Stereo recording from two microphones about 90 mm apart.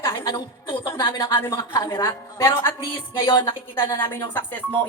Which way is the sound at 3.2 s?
60° left (ahead or behind).